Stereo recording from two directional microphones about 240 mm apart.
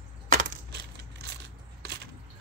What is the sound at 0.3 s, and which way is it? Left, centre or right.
Coin, right.